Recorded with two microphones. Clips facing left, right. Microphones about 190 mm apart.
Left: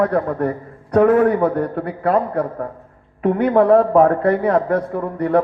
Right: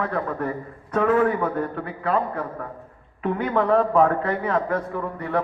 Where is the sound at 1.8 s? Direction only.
65° left (ahead or behind).